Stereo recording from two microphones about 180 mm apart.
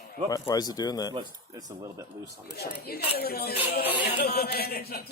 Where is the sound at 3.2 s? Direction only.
60° left (ahead or behind).